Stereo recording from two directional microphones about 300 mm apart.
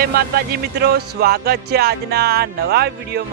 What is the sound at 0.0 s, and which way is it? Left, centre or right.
Speech, right.